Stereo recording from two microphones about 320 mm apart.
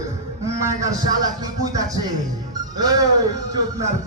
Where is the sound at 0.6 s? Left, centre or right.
Centre.